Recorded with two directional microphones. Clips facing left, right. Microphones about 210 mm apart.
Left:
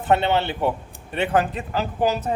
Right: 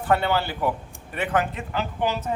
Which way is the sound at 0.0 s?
20° left (ahead or behind).